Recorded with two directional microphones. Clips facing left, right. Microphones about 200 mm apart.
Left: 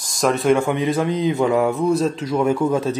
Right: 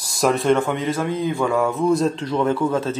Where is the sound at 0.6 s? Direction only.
15° left (ahead or behind).